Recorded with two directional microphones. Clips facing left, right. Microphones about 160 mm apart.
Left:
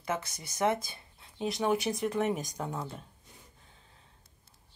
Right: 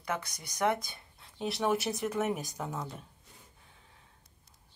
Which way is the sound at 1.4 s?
Centre (ahead or behind).